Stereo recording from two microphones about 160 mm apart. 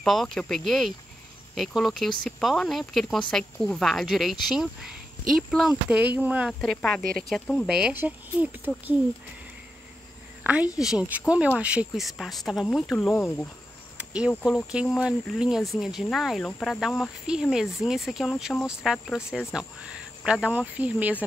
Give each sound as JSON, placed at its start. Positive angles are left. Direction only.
{"t": 0.0, "sound": "speech", "side_deg": 0}
{"t": 6.6, "sound": "speech", "side_deg": 5}
{"t": 10.4, "sound": "speech", "side_deg": -10}
{"t": 13.1, "sound": "speech", "side_deg": 15}
{"t": 13.9, "sound": "cricket", "side_deg": -5}
{"t": 14.4, "sound": "speech", "side_deg": -5}